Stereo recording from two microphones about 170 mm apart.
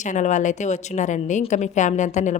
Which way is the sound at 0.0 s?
45° left (ahead or behind).